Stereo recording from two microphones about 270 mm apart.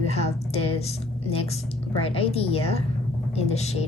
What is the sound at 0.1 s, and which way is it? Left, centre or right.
A woman's voice, left.